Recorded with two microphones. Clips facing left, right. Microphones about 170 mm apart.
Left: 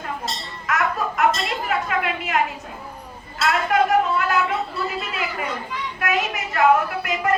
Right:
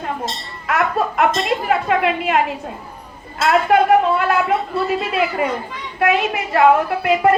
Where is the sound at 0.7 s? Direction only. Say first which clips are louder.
Right 4 dB; 25° right (ahead or behind).